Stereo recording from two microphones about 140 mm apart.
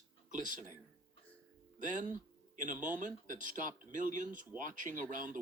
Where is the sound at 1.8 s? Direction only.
65° right (ahead or behind).